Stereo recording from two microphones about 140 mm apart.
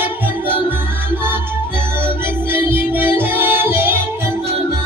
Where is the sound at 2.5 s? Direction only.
15° right (ahead or behind).